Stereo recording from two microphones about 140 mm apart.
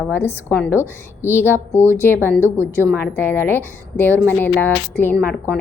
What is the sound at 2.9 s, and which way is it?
A woman's voice, 15° left (ahead or behind).